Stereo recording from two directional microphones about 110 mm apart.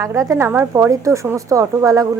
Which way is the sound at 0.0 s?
30° right (ahead or behind).